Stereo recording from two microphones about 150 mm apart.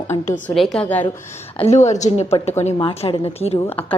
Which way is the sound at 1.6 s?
45° left (ahead or behind).